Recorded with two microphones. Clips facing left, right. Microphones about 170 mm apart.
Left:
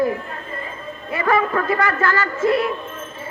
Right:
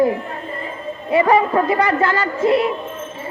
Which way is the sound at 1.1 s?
15° right (ahead or behind).